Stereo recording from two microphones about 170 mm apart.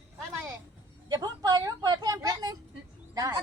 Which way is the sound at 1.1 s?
20° right (ahead or behind).